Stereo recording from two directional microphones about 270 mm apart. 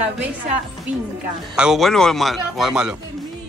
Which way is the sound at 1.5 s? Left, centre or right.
Centre.